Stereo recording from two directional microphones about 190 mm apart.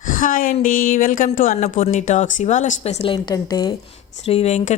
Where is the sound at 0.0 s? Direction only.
45° left (ahead or behind).